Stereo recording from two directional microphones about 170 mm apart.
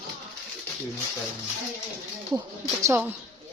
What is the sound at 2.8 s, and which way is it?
Speech, 15° right (ahead or behind).